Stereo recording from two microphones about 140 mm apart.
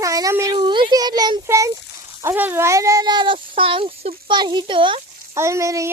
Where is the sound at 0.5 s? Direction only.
35° right (ahead or behind).